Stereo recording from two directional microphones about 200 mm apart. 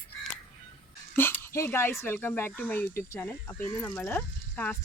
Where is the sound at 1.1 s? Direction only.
10° left (ahead or behind).